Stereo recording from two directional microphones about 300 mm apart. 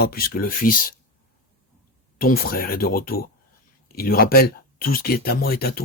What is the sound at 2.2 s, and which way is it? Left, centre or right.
Speech, left.